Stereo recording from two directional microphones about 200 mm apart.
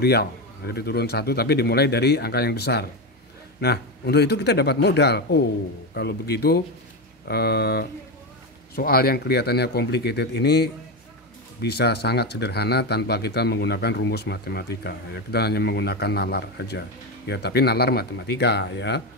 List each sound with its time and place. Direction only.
0.0 s speech: 50° left (ahead or behind)